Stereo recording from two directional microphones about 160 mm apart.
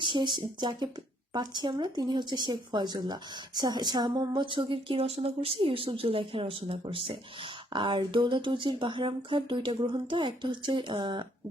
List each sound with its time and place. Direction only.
0.0 s speech: 30° right (ahead or behind)